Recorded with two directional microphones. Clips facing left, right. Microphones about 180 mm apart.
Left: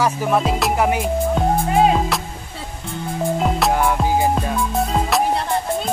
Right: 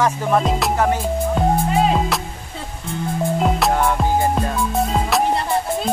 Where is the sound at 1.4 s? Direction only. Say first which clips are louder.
Left 1 dB; centre (ahead or behind).